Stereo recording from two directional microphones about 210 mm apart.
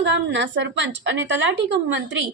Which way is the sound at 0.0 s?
60° right (ahead or behind).